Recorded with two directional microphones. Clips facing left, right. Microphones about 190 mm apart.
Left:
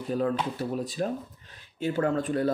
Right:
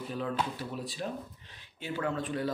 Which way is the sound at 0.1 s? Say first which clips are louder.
Left 7 dB; 45° left (ahead or behind).